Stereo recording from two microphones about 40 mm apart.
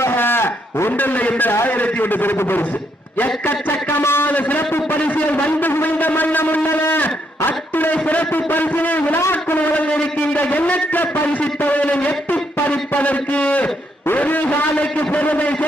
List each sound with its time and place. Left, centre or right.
0.1 s a sound: left
0.9 s a man's voice: left
2.4 s speech: left
3.2 s a man's voice: left
4.0 s a man's voice: left
4.3 s a man's voice: left